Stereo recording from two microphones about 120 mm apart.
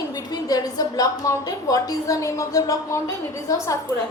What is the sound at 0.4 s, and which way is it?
A woman's voice, 30° left (ahead or behind).